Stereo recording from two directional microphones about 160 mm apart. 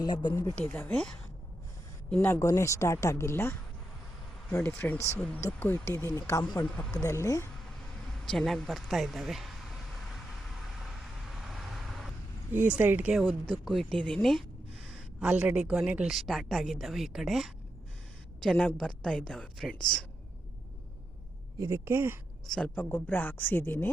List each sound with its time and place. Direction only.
0.0 s speech: 25° left (ahead or behind); by 1.1 s 10° left (ahead or behind)
2.1 s speech: 15° left (ahead or behind)
6.7 s speech: 5° left (ahead or behind)
6.9 s speech: 20° left (ahead or behind)
8.2 s a woman's voice: 5° left (ahead or behind)
11.4 s vehicle: centre (ahead or behind)
12.5 s speech: 10° right (ahead or behind)
13.5 s a woman's voice: 5° left (ahead or behind)
15.2 s a woman's voice: 10° right (ahead or behind)
21.6 s speech: 15° right (ahead or behind)
22.4 s speech: 5° left (ahead or behind)